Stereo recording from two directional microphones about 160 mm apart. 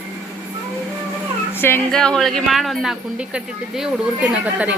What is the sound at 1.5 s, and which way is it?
Speech, 15° left (ahead or behind).